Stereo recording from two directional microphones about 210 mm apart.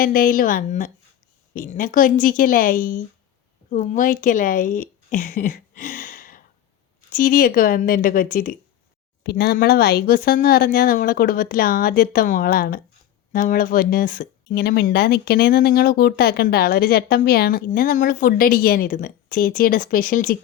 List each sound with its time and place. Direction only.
0.0 s a woman's voice: 45° left (ahead or behind)